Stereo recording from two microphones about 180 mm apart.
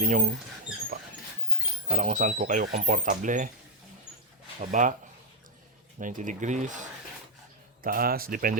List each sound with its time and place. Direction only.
0.0 s speech: 45° right (ahead or behind)
1.9 s speech: 45° right (ahead or behind)
4.6 s speech: 45° right (ahead or behind)
6.0 s speech: 45° right (ahead or behind)
7.8 s speech: 55° right (ahead or behind)